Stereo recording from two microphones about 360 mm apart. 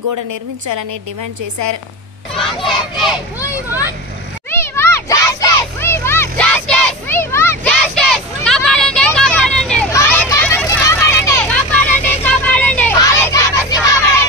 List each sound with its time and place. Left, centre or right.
0.1 s a woman's voice: right
2.3 s a child's voice: centre
4.5 s children playing: centre
12.0 s vehicle: centre